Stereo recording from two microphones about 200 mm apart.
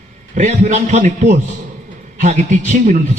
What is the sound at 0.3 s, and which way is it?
A man's voice, 35° right (ahead or behind).